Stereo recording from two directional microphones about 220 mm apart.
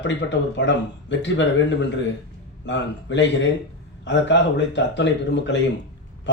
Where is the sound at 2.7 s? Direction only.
55° left (ahead or behind).